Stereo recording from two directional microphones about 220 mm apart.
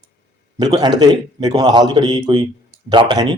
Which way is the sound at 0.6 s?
20° right (ahead or behind).